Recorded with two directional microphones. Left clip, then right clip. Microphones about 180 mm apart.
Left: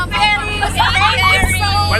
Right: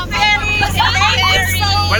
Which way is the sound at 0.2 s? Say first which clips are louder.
Right 2 dB; 10° left (ahead or behind).